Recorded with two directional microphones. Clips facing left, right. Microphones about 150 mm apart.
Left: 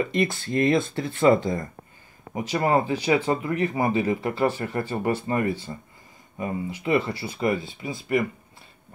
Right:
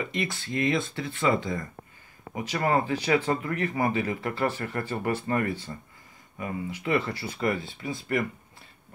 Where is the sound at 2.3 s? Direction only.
25° left (ahead or behind).